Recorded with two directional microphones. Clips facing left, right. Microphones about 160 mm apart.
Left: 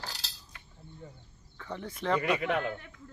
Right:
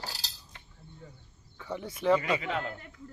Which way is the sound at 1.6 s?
10° right (ahead or behind).